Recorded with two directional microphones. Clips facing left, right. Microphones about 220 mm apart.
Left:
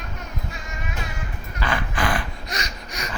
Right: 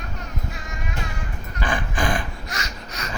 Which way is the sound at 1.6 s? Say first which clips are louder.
Even; 15° right (ahead or behind).